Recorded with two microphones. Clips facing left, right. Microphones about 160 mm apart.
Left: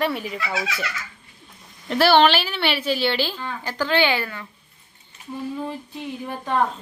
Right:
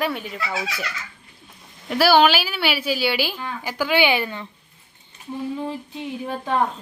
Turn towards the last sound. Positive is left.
turn(degrees=-15)  # may be behind; listen again after turning